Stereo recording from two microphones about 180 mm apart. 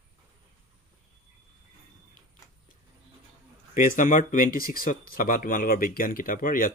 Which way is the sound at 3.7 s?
45° left (ahead or behind).